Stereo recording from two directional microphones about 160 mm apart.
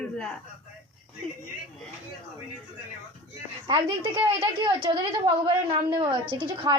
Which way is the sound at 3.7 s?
35° right (ahead or behind).